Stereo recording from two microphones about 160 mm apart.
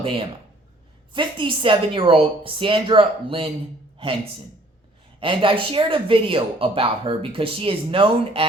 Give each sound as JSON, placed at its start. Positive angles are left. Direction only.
{"t": 1.1, "sound": "speech", "side_deg": -30}
{"t": 3.9, "sound": "a sound", "side_deg": -35}
{"t": 5.2, "sound": "speech", "side_deg": -35}